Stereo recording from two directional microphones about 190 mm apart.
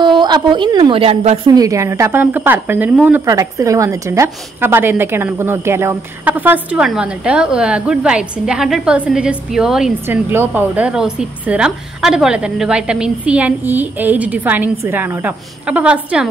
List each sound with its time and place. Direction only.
0.0 s a woman's voice: 25° right (ahead or behind)
1.5 s speech: 20° right (ahead or behind)